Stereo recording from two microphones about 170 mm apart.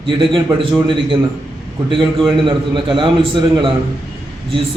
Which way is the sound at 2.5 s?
30° right (ahead or behind).